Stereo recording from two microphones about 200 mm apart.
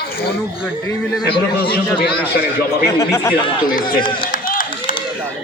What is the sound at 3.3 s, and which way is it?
Speech, 45° left (ahead or behind).